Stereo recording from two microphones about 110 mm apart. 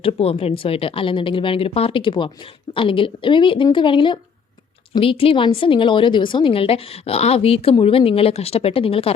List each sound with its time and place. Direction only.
0.0 s a woman's voice: 60° left (ahead or behind)